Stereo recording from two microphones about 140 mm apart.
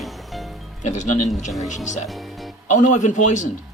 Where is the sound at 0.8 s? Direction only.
60° left (ahead or behind).